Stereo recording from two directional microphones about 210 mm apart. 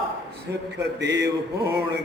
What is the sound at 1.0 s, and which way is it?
Speech, 55° right (ahead or behind).